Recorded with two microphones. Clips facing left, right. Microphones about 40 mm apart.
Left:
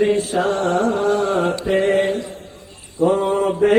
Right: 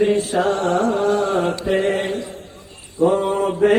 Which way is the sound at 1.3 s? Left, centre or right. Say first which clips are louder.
Left 1 dB; left.